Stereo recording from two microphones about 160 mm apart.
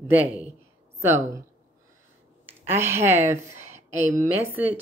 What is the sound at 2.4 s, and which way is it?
Speech, 15° right (ahead or behind).